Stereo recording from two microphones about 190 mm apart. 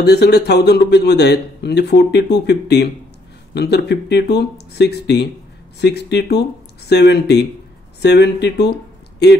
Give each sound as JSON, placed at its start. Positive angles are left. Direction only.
{"t": 0.0, "sound": "speech", "side_deg": 60}